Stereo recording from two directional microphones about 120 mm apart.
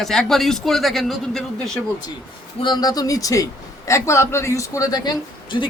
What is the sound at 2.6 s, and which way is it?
Speech, 40° left (ahead or behind).